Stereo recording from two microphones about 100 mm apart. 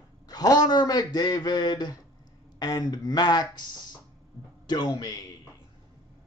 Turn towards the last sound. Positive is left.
turn(degrees=45)  # may be behind; listen again after turning